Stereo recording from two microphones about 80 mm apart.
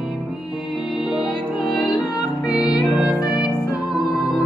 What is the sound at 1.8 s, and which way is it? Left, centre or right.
Music, left.